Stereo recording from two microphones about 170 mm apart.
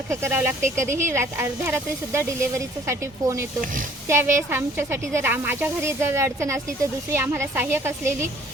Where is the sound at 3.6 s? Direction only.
50° right (ahead or behind).